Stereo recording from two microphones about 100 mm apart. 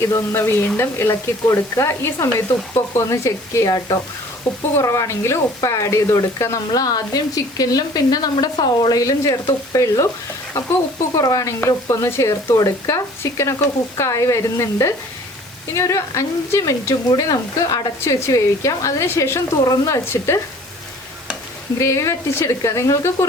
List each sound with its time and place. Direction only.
0.0 s speech: 25° left (ahead or behind)
11.2 s speech: 35° left (ahead or behind)
21.8 s speech: 30° left (ahead or behind)